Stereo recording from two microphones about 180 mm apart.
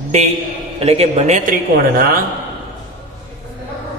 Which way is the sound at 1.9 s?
55° right (ahead or behind).